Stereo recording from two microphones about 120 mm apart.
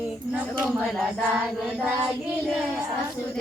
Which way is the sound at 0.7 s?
Centre (ahead or behind).